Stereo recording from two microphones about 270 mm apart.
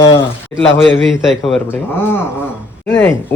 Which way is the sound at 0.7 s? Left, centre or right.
Left.